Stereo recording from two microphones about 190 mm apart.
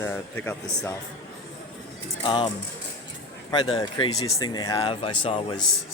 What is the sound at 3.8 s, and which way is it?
Speech, 20° left (ahead or behind).